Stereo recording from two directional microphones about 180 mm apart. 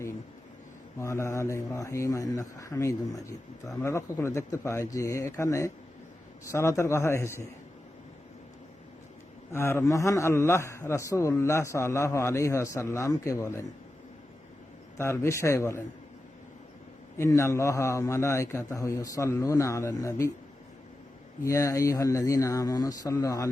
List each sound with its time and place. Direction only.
0.9 s a man's voice: 15° left (ahead or behind)
9.5 s a man's voice: 15° left (ahead or behind)
14.9 s a man's voice: 15° left (ahead or behind)
17.2 s a man's voice: 15° left (ahead or behind)
21.4 s speech: 20° left (ahead or behind)